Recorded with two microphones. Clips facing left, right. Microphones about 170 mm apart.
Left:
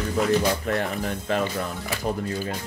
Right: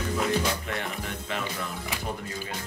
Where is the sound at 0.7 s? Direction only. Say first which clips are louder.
Left 7 dB; 40° left (ahead or behind).